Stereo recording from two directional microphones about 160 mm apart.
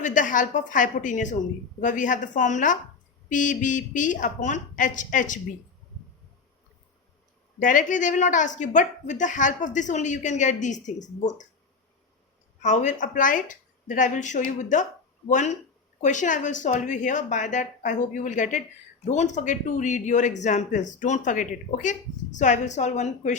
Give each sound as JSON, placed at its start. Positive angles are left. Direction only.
{"t": 0.0, "sound": "a woman's voice", "side_deg": 55}
{"t": 7.6, "sound": "a woman's voice", "side_deg": 55}
{"t": 12.6, "sound": "a woman's voice", "side_deg": 50}